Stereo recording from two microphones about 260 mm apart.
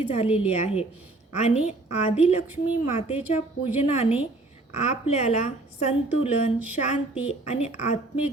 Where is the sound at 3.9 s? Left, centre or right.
Left.